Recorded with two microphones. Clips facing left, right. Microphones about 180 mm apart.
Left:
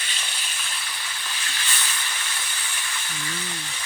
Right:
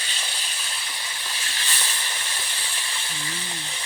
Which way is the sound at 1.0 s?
30° right (ahead or behind).